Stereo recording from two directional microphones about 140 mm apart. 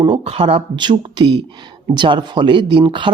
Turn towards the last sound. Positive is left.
turn(degrees=-35)  # may be behind; listen again after turning